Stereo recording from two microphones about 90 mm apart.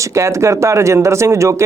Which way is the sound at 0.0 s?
35° right (ahead or behind).